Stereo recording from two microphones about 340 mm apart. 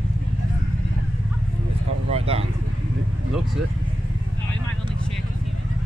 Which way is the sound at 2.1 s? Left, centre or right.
Centre.